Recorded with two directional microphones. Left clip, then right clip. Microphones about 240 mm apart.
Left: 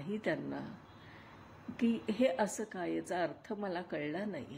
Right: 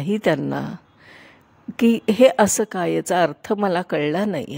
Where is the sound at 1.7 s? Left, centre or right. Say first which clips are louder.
Right 17 dB; right.